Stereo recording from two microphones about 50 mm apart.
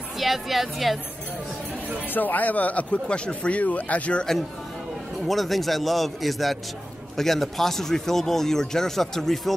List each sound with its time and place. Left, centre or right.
0.2 s a man's voice: centre
2.1 s speech: left
5.2 s a man's voice: centre